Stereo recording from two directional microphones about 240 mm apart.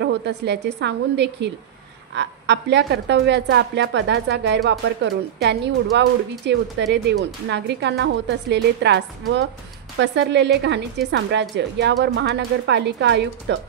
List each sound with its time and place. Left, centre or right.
0.0 s a woman's voice: right